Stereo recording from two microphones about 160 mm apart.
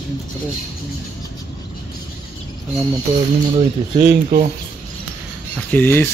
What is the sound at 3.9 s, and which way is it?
Speech, 30° right (ahead or behind).